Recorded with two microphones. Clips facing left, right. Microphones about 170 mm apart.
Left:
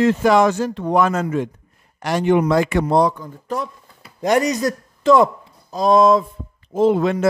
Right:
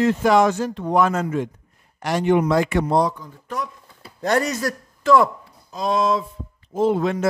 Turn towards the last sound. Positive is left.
turn(degrees=85)